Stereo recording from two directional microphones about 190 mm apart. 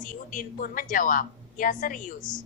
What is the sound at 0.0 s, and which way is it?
A woman's voice, 45° left (ahead or behind).